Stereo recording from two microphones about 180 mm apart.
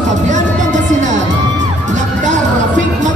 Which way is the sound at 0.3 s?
45° right (ahead or behind).